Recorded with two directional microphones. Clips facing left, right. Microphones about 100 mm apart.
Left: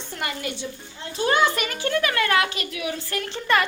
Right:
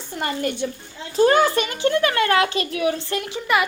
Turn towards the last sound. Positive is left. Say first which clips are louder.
# right 1 dB
turn(degrees=-10)  # may be behind; listen again after turning